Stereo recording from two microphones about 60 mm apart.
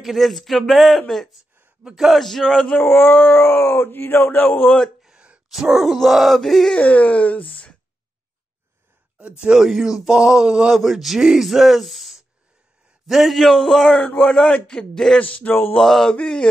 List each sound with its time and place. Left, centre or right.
0.0 s speech: centre
1.8 s a man's voice: centre
2.0 s speech: centre
2.8 s speech: left
5.0 s gasp: centre
5.5 s speech: centre
6.7 s speech: left
9.4 s speech: centre
10.8 s speech: centre
13.9 s a man's voice: centre
15.1 s speech: left
15.7 s a man's voice: centre